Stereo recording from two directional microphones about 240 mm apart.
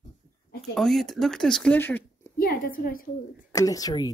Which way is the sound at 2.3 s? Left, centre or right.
Left.